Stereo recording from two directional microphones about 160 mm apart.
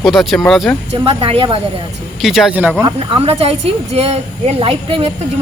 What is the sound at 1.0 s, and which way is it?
Speech, 35° right (ahead or behind).